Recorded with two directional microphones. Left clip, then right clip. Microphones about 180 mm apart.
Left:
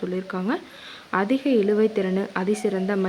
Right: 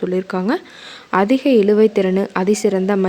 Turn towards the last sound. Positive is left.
turn(degrees=-35)  # may be behind; listen again after turning